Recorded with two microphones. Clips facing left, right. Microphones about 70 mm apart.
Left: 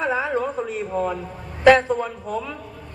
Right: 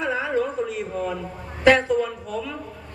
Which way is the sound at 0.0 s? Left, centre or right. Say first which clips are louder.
Left 1 dB; left.